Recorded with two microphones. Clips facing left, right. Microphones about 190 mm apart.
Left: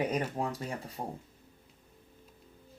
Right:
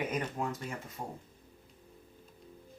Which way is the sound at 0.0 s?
35° left (ahead or behind).